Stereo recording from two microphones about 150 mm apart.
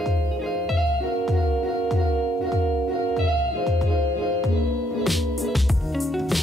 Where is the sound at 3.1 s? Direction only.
Centre (ahead or behind).